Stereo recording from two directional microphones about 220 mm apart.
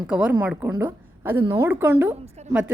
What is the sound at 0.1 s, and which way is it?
A woman's voice, 5° right (ahead or behind).